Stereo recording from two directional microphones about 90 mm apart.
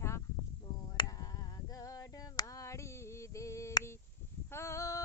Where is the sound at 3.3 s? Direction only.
35° left (ahead or behind).